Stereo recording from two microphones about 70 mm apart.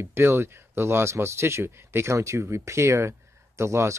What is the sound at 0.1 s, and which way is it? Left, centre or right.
Speech, right.